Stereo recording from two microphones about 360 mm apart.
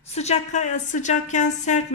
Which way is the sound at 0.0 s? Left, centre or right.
Centre.